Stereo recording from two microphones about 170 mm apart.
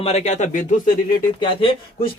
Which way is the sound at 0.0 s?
40° left (ahead or behind).